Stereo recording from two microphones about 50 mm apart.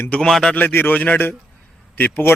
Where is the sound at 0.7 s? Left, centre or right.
Left.